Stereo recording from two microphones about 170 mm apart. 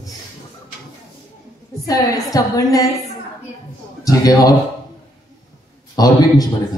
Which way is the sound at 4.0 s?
20° left (ahead or behind).